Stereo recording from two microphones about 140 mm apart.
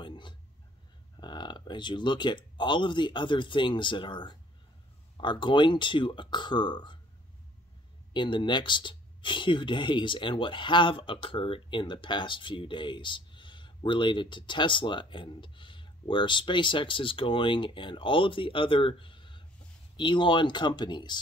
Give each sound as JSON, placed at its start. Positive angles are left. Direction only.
{"t": 0.0, "sound": "a sound", "side_deg": 35}
{"t": 1.1, "sound": "speech", "side_deg": 30}
{"t": 8.1, "sound": "speech", "side_deg": 35}